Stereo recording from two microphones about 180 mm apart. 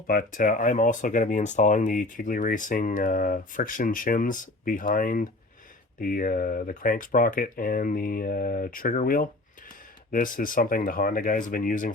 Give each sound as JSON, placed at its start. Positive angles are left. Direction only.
{"t": 0.1, "sound": "speech", "side_deg": 50}